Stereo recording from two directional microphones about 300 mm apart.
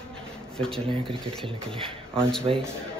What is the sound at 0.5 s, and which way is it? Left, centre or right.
Speech, centre.